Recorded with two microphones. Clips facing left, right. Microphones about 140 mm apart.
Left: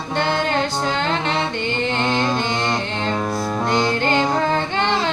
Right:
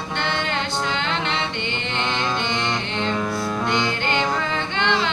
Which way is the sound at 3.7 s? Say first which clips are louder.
Left 7 dB; 40° left (ahead or behind).